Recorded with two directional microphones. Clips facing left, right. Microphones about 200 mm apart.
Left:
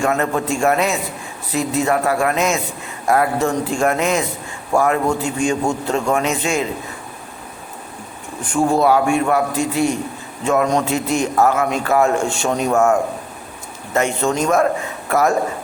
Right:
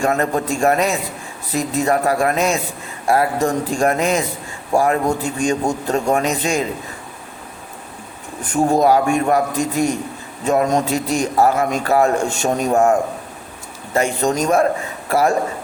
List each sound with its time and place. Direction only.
0.0 s a man's voice: 35° right (ahead or behind)
8.8 s a man's voice: 40° right (ahead or behind)